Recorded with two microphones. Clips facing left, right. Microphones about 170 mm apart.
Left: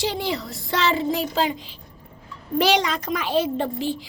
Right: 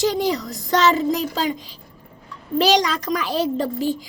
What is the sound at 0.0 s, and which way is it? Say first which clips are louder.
A child's voice: right 5 dB; 40° right (ahead or behind).